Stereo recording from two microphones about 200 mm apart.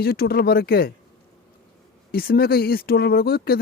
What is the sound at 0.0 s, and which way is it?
Speech, 50° left (ahead or behind).